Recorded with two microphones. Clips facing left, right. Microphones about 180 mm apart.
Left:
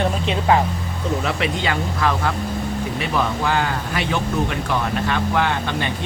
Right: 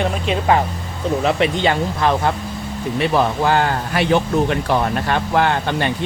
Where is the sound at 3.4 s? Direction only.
45° right (ahead or behind).